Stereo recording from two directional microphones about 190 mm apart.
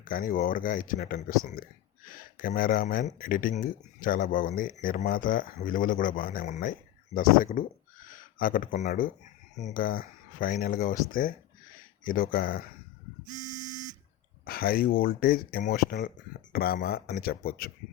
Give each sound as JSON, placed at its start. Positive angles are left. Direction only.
{"t": 0.0, "sound": "speech", "side_deg": 45}
{"t": 13.2, "sound": "buzzer", "side_deg": -20}
{"t": 14.4, "sound": "speech", "side_deg": 50}